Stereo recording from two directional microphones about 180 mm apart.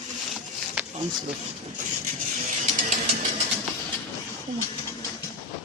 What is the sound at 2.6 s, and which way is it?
Ratchet, 40° right (ahead or behind).